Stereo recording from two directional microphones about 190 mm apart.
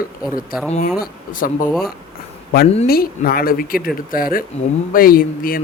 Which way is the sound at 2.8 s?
50° left (ahead or behind).